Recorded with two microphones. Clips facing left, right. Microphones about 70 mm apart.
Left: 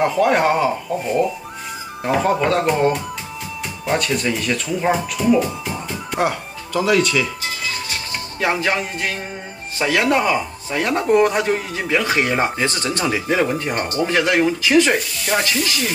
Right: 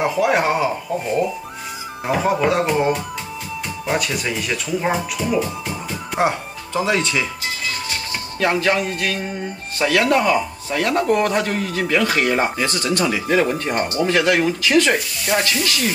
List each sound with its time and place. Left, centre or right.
0.0 s speech: centre
6.1 s speech: right
8.4 s speech: centre
12.5 s speech: left
13.3 s speech: centre
14.0 s speech: centre
15.3 s speech: centre